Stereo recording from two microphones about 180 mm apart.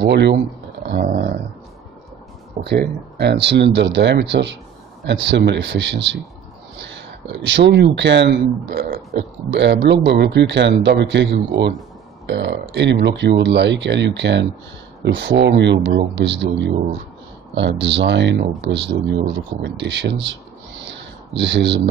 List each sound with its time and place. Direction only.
0.1 s speech: 75° right (ahead or behind)
0.8 s dog: 50° right (ahead or behind)
2.6 s a man's voice: 65° right (ahead or behind)
20.2 s a sound: 85° right
21.4 s a man's voice: 80° right